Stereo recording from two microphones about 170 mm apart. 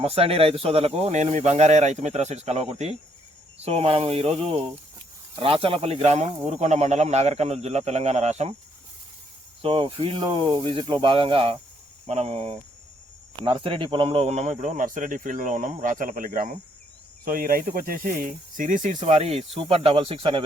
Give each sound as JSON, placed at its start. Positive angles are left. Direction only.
{"t": 0.0, "sound": "speech", "side_deg": -35}
{"t": 9.6, "sound": "speech", "side_deg": -30}